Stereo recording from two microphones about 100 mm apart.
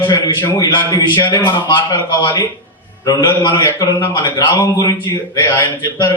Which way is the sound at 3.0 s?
45° left (ahead or behind).